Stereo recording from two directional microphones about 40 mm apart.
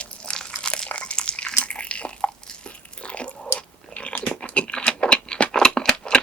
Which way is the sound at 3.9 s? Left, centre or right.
Left.